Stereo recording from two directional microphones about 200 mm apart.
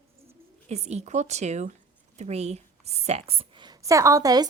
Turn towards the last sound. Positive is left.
turn(degrees=-20)  # may be behind; listen again after turning